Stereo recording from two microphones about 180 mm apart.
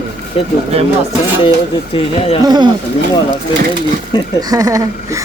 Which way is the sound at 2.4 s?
25° right (ahead or behind).